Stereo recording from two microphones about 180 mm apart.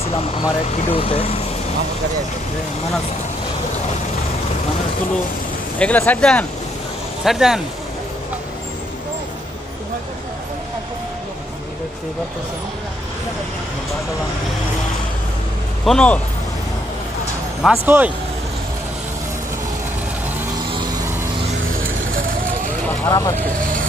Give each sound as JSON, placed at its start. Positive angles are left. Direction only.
{"t": 0.0, "sound": "speech", "side_deg": 30}
{"t": 5.8, "sound": "speech", "side_deg": 10}
{"t": 7.2, "sound": "speech", "side_deg": 0}
{"t": 15.8, "sound": "speech", "side_deg": 5}
{"t": 17.6, "sound": "a man's voice", "side_deg": -10}
{"t": 21.8, "sound": "vehicle", "side_deg": -50}
{"t": 22.8, "sound": "speech", "side_deg": 15}
{"t": 23.6, "sound": "vehicle", "side_deg": -50}